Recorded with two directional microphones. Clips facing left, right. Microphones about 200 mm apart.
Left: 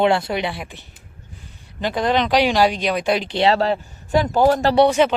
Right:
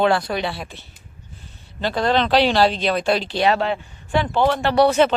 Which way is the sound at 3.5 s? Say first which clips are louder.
Left 3 dB; 35° left (ahead or behind).